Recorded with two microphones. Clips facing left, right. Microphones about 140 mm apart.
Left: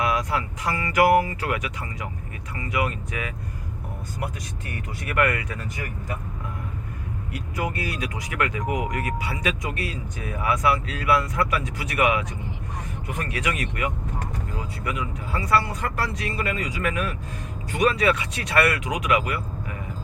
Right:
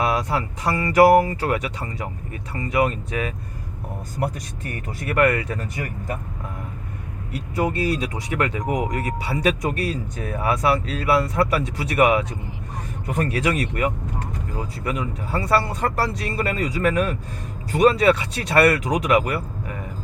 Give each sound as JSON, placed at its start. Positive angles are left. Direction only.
{"t": 0.0, "sound": "speech", "side_deg": -30}
{"t": 4.2, "sound": "speech", "side_deg": -50}
{"t": 5.0, "sound": "speech", "side_deg": -35}
{"t": 7.3, "sound": "speech", "side_deg": -30}